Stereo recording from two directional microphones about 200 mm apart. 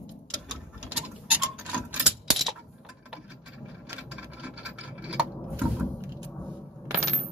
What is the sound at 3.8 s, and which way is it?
Scratch, 5° right (ahead or behind).